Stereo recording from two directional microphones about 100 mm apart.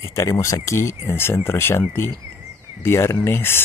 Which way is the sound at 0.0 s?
30° left (ahead or behind).